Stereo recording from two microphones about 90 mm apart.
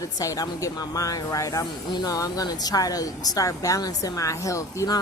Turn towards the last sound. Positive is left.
turn(degrees=40)  # may be behind; listen again after turning